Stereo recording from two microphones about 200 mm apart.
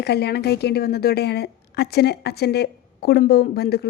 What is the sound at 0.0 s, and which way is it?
A woman's voice, 55° left (ahead or behind).